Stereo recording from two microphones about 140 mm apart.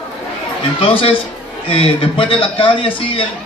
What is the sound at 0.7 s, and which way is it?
A man's voice, 45° left (ahead or behind).